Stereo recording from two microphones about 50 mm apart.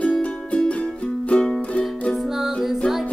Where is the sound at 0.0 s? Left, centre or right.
Left.